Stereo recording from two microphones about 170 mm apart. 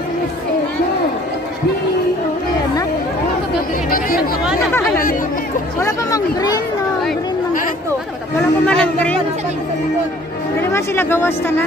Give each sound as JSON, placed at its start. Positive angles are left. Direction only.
{"t": 5.8, "sound": "speech", "side_deg": 20}
{"t": 8.4, "sound": "speech", "side_deg": 5}
{"t": 10.6, "sound": "speech", "side_deg": 15}